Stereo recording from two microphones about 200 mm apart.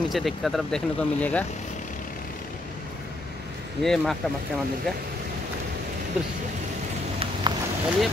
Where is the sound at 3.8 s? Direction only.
Centre (ahead or behind).